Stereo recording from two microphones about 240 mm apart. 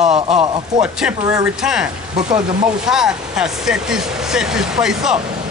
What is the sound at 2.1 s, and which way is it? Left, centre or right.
Speech, right.